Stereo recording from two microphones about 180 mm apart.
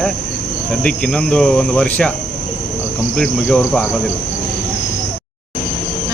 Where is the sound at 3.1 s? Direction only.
5° left (ahead or behind).